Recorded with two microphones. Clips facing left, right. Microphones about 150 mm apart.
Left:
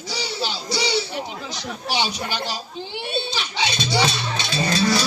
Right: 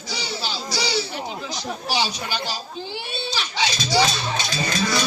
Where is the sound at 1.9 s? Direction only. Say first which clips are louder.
Left 1 dB; 25° left (ahead or behind).